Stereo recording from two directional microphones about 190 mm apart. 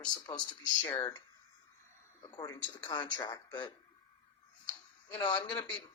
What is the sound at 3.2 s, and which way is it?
Speech, 20° left (ahead or behind).